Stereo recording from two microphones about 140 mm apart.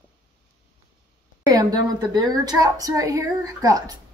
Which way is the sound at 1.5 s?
25° right (ahead or behind).